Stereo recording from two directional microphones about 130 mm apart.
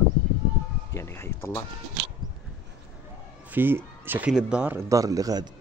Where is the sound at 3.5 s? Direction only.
15° right (ahead or behind).